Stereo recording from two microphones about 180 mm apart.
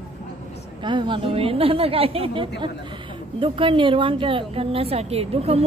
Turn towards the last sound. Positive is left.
turn(degrees=-35)  # may be behind; listen again after turning